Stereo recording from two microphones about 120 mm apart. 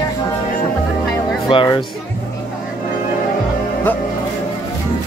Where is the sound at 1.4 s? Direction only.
40° left (ahead or behind).